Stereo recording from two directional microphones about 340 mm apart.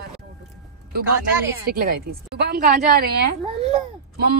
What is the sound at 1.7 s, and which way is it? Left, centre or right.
A woman's voice, right.